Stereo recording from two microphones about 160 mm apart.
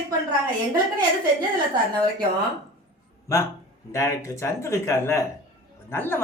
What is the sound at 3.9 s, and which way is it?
Speech, 20° left (ahead or behind).